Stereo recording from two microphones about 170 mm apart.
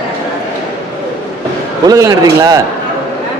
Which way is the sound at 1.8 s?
20° right (ahead or behind).